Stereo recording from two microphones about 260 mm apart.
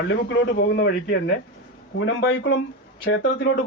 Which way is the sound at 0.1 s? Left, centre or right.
Left.